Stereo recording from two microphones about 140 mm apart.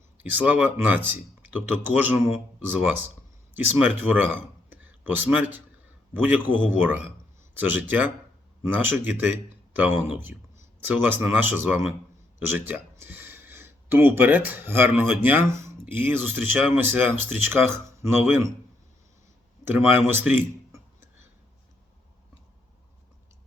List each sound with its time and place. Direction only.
0.2 s speech: 10° right (ahead or behind)
19.6 s speech: 15° right (ahead or behind)